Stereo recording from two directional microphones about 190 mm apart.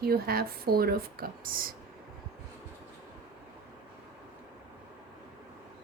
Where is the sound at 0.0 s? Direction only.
55° right (ahead or behind).